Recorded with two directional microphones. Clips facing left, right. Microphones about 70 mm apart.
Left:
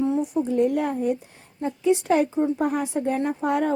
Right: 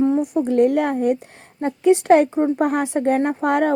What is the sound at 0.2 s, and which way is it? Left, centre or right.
Speech, right.